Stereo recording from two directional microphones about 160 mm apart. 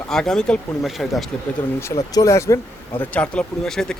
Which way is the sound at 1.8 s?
20° left (ahead or behind).